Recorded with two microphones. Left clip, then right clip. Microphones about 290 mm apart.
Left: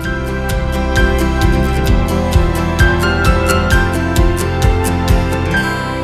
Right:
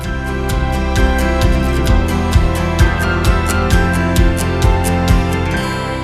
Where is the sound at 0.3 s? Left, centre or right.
Centre.